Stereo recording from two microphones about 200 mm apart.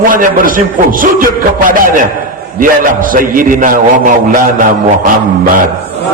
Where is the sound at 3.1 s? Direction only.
45° right (ahead or behind).